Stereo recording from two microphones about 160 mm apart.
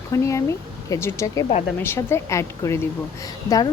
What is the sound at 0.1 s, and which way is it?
A woman's voice, 20° left (ahead or behind).